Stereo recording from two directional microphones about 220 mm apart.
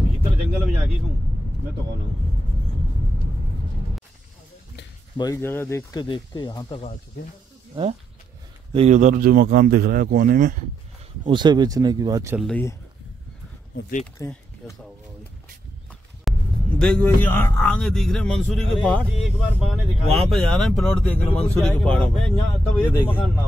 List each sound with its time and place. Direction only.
5.1 s speech: 15° left (ahead or behind)
8.7 s speech: 30° right (ahead or behind)
11.2 s speech: 20° right (ahead or behind)
12.4 s speech: 5° left (ahead or behind)
13.7 s speech: 40° left (ahead or behind)
14.1 s speech: 15° left (ahead or behind)
15.9 s a man's voice: 5° left (ahead or behind)